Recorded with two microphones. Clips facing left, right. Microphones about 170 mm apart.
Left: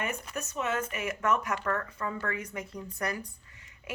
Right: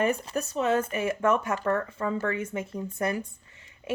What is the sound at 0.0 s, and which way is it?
Speech, 35° right (ahead or behind).